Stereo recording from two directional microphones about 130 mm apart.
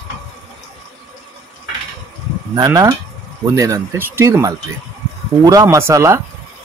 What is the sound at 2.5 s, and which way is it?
Speech, 30° right (ahead or behind).